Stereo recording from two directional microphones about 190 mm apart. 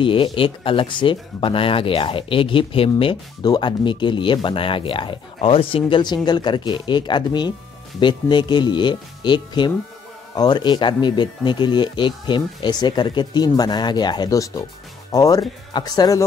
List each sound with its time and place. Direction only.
0.0 s speech: 25° left (ahead or behind)